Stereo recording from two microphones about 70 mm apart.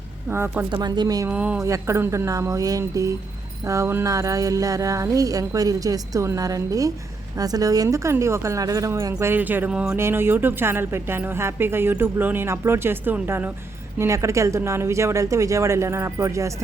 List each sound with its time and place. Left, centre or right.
0.3 s speech: right
0.7 s speech: right
1.3 s speech: centre
1.5 s speech: right
9.2 s speech: right
9.7 s speech: centre
10.0 s speech: right
14.0 s speech: right